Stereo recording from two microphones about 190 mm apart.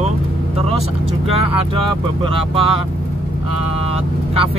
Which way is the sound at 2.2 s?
30° right (ahead or behind).